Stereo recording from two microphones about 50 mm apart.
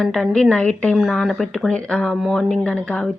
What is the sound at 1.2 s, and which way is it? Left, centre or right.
Speech, centre.